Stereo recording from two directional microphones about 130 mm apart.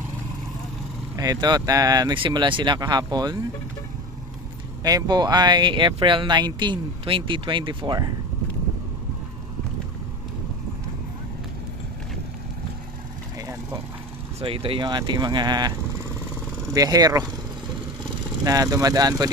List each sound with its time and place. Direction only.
1.1 s speech: 30° right (ahead or behind)
2.1 s speech: 40° right (ahead or behind)
4.8 s speech: 30° right (ahead or behind)
14.4 s speech: 45° right (ahead or behind)
16.7 s speech: 30° right (ahead or behind)
18.4 s speech: 25° right (ahead or behind)